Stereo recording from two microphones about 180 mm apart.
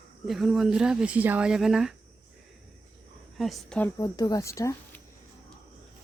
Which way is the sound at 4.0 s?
20° left (ahead or behind).